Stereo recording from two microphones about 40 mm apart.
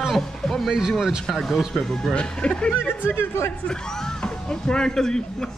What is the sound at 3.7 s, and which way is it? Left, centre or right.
Speech, centre.